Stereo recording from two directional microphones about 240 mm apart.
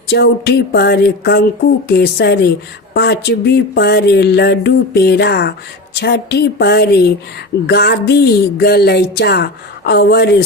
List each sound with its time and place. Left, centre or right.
0.1 s speech: left